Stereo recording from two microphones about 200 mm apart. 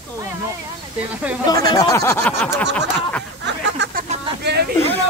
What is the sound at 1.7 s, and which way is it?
Speech, 15° left (ahead or behind).